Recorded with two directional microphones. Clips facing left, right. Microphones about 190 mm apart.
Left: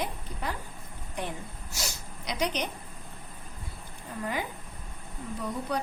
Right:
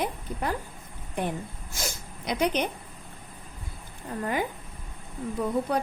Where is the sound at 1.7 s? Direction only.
50° right (ahead or behind).